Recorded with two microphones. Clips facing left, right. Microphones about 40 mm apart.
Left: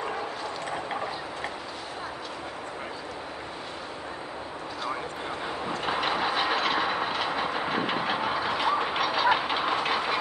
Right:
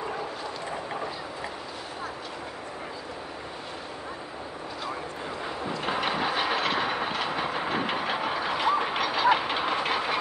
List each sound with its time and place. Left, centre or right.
5.9 s train: centre